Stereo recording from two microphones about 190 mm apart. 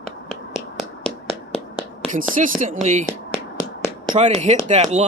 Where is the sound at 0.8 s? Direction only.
Centre (ahead or behind).